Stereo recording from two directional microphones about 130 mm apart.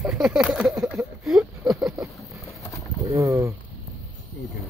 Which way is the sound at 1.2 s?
5° right (ahead or behind).